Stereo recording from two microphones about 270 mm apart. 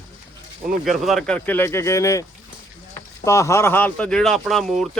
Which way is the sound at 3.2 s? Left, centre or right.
Centre.